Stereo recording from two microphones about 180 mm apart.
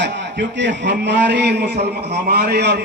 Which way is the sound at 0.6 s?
70° right (ahead or behind).